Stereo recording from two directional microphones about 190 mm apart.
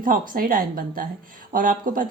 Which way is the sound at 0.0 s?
45° right (ahead or behind).